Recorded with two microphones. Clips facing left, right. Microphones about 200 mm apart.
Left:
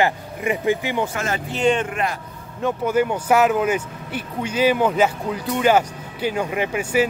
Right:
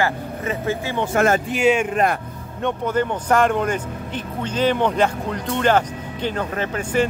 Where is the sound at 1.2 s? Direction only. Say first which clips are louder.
Right 8 dB; 50° right (ahead or behind).